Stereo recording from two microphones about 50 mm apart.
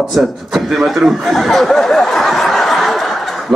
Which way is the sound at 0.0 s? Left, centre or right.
Centre.